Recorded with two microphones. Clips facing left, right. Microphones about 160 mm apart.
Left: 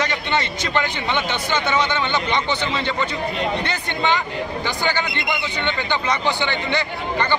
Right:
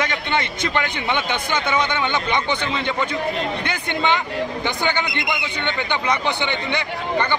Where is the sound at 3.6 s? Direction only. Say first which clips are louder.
Even; 15° right (ahead or behind).